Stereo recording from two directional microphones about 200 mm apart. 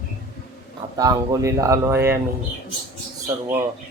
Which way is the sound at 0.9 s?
20° right (ahead or behind).